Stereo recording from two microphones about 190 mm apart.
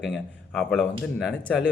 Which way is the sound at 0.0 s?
Centre (ahead or behind).